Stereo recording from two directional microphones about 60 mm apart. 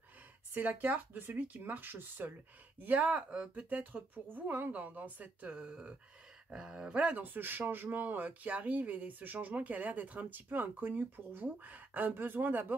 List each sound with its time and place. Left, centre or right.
0.6 s speech: right
2.8 s a man's voice: right